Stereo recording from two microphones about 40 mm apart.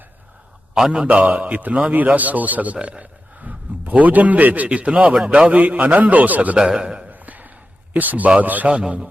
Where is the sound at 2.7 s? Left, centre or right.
Right.